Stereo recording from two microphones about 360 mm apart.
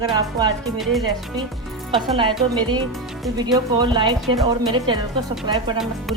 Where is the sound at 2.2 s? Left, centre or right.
Centre.